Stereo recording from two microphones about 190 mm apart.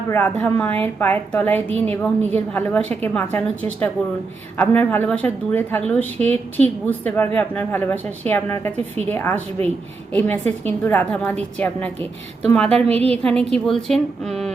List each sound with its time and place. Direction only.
0.1 s a woman's voice: 10° left (ahead or behind)
12.6 s a woman's voice: 30° right (ahead or behind)
13.2 s a woman's voice: 5° left (ahead or behind)